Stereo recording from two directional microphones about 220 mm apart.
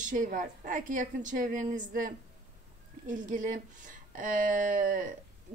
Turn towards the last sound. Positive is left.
turn(degrees=-35)  # may be behind; listen again after turning